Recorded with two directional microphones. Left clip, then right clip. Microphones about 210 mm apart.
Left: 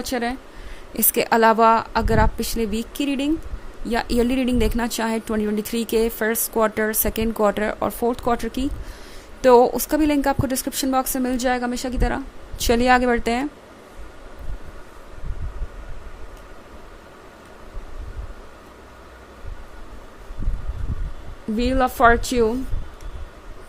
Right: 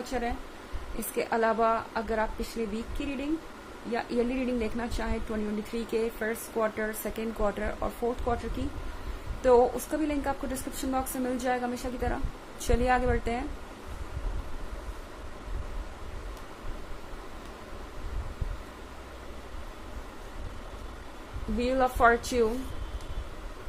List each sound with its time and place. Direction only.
0.0 s speech: 50° left (ahead or behind)
3.9 s speech: 50° left (ahead or behind)
21.6 s a woman's voice: 40° left (ahead or behind)